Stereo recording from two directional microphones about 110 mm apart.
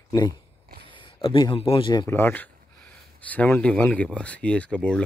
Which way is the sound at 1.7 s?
45° left (ahead or behind).